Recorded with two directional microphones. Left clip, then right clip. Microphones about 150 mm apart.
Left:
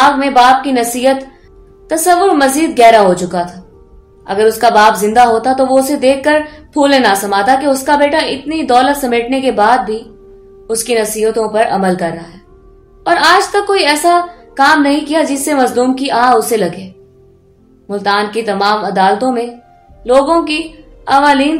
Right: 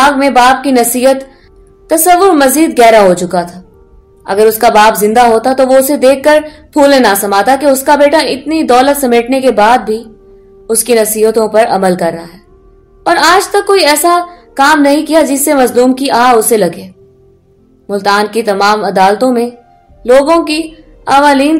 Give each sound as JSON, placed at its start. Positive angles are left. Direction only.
{"t": 0.2, "sound": "a woman's voice", "side_deg": -50}